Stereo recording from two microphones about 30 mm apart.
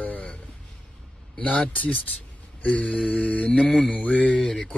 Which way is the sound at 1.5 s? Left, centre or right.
Left.